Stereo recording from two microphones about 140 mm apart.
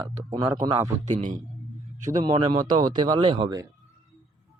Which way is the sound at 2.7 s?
30° right (ahead or behind).